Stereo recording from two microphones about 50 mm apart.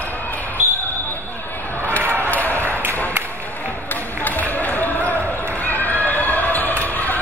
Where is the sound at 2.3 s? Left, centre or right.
Left.